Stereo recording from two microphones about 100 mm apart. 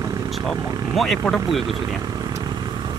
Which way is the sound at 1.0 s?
Centre (ahead or behind).